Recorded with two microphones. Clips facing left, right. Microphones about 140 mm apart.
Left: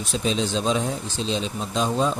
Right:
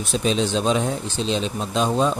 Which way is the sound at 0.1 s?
65° right (ahead or behind).